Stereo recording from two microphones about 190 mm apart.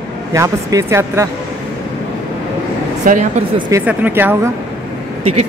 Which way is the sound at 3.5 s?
20° right (ahead or behind).